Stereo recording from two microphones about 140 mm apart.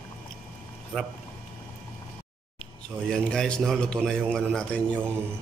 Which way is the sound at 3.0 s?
5° left (ahead or behind).